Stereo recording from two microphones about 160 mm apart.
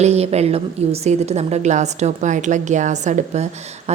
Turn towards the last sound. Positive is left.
turn(degrees=-45)  # may be behind; listen again after turning